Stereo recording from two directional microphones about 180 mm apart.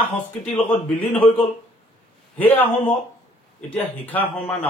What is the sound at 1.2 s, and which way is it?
Speech, 30° left (ahead or behind).